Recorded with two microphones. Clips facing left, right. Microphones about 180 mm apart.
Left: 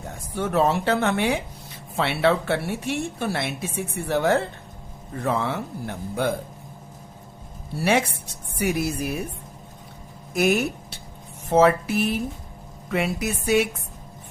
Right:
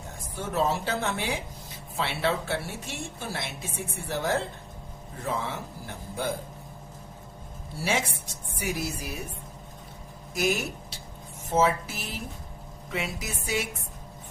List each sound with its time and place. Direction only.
0.3 s speech: 65° left (ahead or behind)
7.8 s speech: 65° left (ahead or behind)
10.3 s speech: 60° left (ahead or behind)